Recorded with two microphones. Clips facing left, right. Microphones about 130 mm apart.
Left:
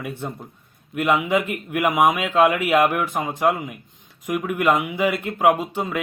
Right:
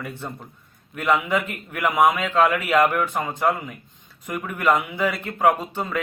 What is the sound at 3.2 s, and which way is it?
Speech, 15° left (ahead or behind).